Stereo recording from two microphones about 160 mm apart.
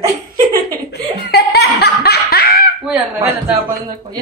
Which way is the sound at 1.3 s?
85° left.